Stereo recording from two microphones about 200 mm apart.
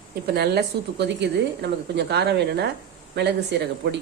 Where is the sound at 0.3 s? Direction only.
55° right (ahead or behind).